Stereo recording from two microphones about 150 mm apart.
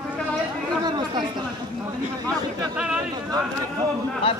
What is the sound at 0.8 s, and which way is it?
Speech, 30° right (ahead or behind).